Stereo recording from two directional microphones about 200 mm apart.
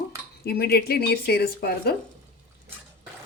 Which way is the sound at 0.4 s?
50° left (ahead or behind).